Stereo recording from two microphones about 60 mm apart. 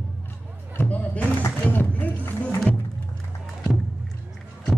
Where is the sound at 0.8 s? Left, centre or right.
Left.